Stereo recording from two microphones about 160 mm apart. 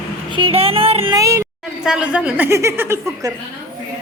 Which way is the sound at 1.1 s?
20° right (ahead or behind).